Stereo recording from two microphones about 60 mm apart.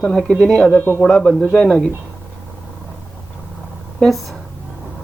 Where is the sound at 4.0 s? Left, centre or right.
Centre.